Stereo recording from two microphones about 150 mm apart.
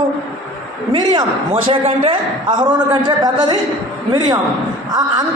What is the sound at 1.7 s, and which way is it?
A man's voice, 40° right (ahead or behind).